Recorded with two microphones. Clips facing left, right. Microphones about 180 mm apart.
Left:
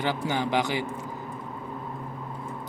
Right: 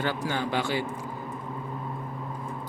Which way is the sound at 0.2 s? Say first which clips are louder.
Left 2 dB; 15° left (ahead or behind).